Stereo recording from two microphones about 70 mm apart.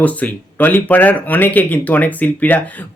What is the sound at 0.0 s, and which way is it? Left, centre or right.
Speech, left.